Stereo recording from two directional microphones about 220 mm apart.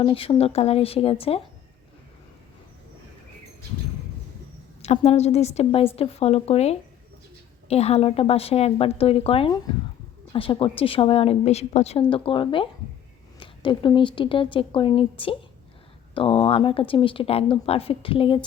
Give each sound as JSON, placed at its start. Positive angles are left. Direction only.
{"t": 0.0, "sound": "speech", "side_deg": 25}
{"t": 4.8, "sound": "speech", "side_deg": 30}